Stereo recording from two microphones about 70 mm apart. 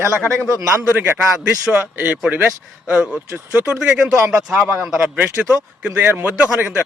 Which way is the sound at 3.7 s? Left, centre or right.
Centre.